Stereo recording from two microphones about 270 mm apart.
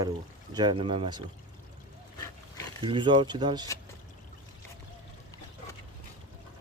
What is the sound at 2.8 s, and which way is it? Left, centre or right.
Speech, centre.